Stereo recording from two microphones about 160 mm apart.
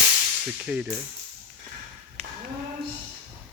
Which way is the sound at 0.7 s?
5° right (ahead or behind).